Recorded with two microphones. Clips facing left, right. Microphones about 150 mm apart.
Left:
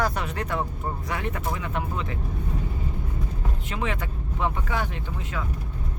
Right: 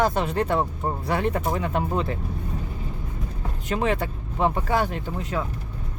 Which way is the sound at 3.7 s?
35° right (ahead or behind).